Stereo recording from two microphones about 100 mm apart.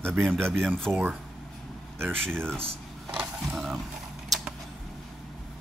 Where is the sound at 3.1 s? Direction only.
10° right (ahead or behind).